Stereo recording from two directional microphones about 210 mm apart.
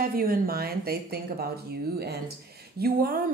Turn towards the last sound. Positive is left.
turn(degrees=-45)  # may be behind; listen again after turning